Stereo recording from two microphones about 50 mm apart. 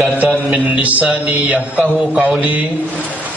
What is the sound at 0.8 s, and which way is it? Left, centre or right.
A man's voice, right.